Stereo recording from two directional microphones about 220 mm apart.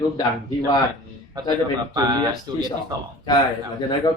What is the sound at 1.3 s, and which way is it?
Speech, 20° right (ahead or behind).